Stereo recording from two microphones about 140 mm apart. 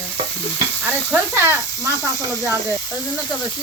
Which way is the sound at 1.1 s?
15° right (ahead or behind).